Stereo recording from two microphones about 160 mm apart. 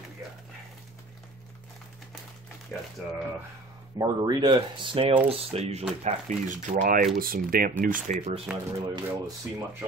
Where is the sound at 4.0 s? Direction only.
25° right (ahead or behind); by 7.0 s 55° right (ahead or behind).